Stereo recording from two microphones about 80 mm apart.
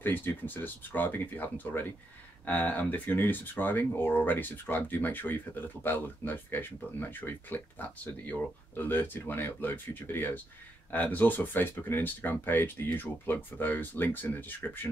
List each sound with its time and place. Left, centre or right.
0.0 s speech: left